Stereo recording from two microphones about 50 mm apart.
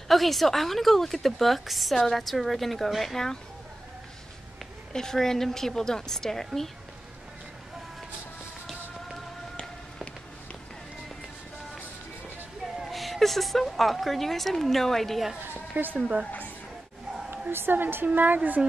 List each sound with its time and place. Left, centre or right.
0.1 s a woman's voice: centre
4.9 s a woman's voice: centre
12.7 s a woman's voice: centre
15.8 s speech: right
16.3 s a woman's voice: left
17.5 s speech: right